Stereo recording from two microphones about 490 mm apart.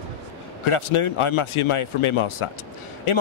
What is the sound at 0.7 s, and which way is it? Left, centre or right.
A man's voice, left.